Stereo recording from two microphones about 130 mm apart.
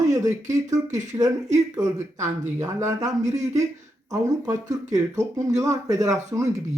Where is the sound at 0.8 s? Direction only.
70° right (ahead or behind).